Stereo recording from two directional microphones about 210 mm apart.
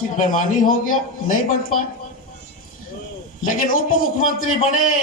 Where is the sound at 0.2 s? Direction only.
40° left (ahead or behind).